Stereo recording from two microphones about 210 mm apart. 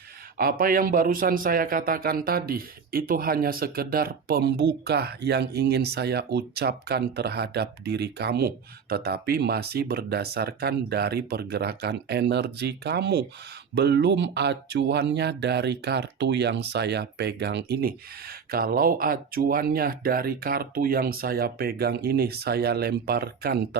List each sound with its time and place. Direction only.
0.3 s a man's voice: 45° right (ahead or behind)